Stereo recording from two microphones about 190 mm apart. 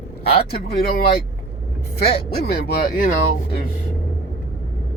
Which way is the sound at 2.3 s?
55° left (ahead or behind).